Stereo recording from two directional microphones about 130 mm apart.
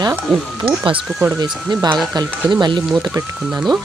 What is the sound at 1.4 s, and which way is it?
Speech, 30° right (ahead or behind).